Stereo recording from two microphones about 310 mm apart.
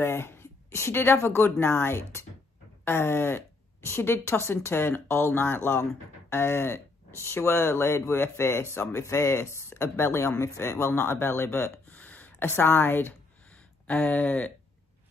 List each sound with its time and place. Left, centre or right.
0.0 s speech: centre